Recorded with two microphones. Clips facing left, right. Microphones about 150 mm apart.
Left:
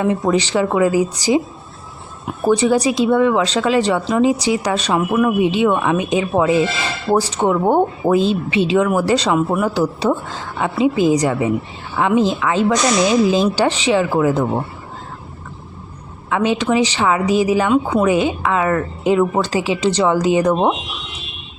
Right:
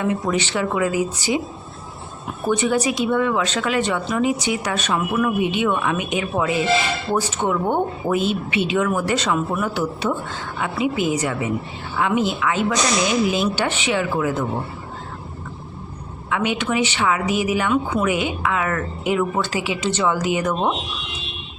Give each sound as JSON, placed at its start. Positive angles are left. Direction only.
{"t": 0.0, "sound": "speech", "side_deg": 30}
{"t": 2.4, "sound": "a woman's voice", "side_deg": 35}
{"t": 16.3, "sound": "a woman's voice", "side_deg": 35}